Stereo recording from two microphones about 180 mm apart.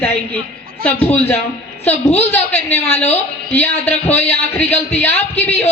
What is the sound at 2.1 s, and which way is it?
A woman's voice, 10° left (ahead or behind).